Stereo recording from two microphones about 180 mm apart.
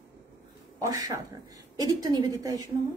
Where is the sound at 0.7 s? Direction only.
20° right (ahead or behind).